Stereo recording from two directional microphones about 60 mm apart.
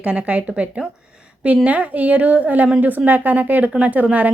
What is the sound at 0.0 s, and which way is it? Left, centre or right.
Speech, centre.